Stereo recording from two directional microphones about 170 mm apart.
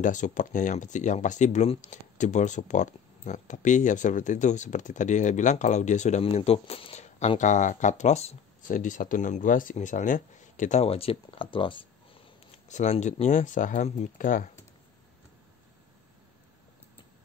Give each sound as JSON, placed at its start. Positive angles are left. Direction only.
{"t": 0.0, "sound": "speech", "side_deg": 50}
{"t": 12.6, "sound": "speech", "side_deg": 40}